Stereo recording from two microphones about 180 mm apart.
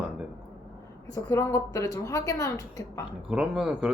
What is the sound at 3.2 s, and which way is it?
Speech, 5° right (ahead or behind).